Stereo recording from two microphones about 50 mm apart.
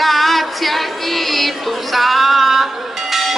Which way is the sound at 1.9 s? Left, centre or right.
Centre.